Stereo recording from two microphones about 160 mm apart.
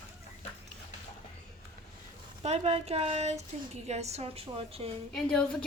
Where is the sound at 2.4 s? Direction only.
40° right (ahead or behind).